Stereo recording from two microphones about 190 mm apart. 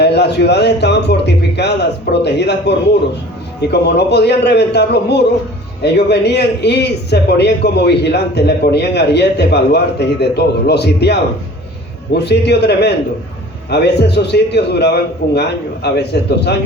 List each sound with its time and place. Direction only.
0.0 s a man's voice: 60° left (ahead or behind)